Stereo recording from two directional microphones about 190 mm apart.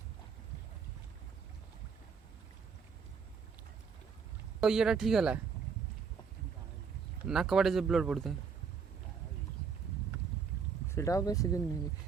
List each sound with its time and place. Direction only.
4.6 s speech: 5° right (ahead or behind)
7.3 s speech: 5° right (ahead or behind)
10.8 s speech: 15° left (ahead or behind)